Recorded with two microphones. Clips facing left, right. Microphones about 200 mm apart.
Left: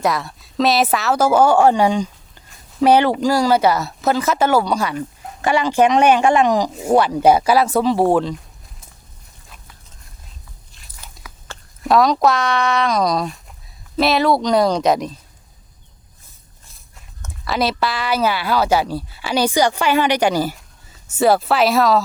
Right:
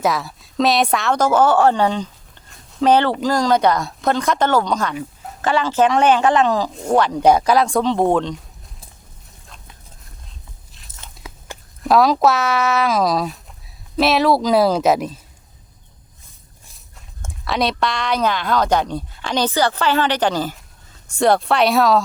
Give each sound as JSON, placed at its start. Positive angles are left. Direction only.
{"t": 0.0, "sound": "speech", "side_deg": 0}
{"t": 2.5, "sound": "a sound", "side_deg": 5}
{"t": 3.2, "sound": "speech", "side_deg": 10}
{"t": 11.0, "sound": "biting", "side_deg": -25}
{"t": 11.8, "sound": "speech", "side_deg": 0}
{"t": 17.4, "sound": "speech", "side_deg": 0}